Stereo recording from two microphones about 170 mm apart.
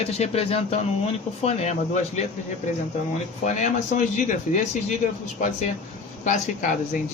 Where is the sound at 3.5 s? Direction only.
45° left (ahead or behind).